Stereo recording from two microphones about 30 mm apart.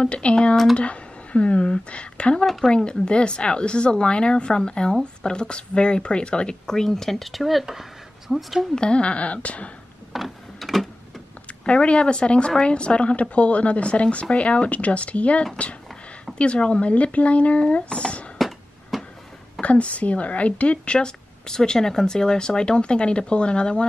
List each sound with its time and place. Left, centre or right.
0.0 s speech: left
2.4 s a woman's voice: centre
2.7 s speech: left
6.7 s a woman's voice: centre
8.7 s speech: left
10.1 s printer: centre
11.6 s speech: left
18.4 s a sound: centre
19.6 s speech: left
21.5 s speech: left